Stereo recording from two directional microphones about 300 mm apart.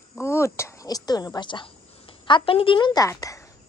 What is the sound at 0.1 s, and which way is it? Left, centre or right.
A woman's voice, centre.